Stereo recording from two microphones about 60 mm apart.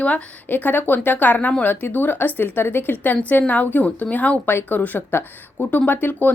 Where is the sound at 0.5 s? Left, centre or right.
Left.